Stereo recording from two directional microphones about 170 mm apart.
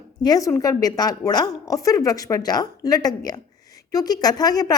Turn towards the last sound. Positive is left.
turn(degrees=20)  # may be behind; listen again after turning